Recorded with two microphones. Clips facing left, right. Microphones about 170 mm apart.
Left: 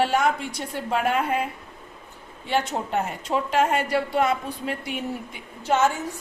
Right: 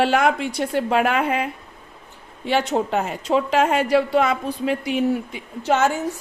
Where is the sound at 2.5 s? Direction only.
90° right.